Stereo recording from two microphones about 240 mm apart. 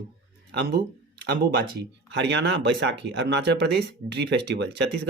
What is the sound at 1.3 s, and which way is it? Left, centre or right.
Speech, right.